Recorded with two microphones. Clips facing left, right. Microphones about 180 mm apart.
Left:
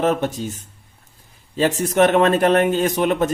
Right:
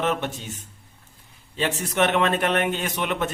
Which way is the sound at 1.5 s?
40° left (ahead or behind).